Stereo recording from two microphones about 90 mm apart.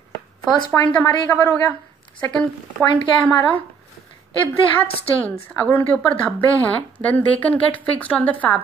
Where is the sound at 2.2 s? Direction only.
15° left (ahead or behind).